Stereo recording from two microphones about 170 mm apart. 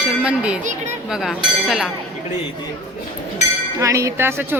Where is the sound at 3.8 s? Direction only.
20° right (ahead or behind).